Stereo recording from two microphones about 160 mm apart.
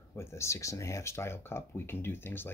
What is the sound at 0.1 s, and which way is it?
Speech, 15° left (ahead or behind).